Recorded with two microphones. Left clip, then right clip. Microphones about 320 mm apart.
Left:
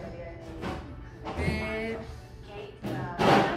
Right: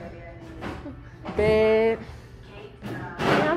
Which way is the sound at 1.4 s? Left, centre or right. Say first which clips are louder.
Right 16 dB; centre.